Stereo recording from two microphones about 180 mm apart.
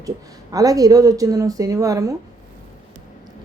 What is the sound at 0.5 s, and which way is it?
Speech, 20° right (ahead or behind).